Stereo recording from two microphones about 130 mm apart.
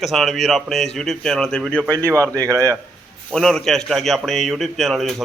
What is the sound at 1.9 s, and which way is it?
Speech, 25° right (ahead or behind).